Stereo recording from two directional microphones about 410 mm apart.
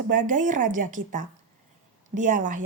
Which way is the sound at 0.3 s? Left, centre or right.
Centre.